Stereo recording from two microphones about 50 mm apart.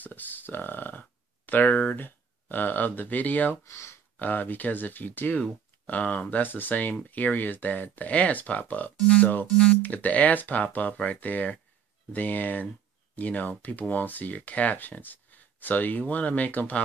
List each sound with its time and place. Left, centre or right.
0.0 s speech: left
3.6 s speech: left
4.2 s speech: left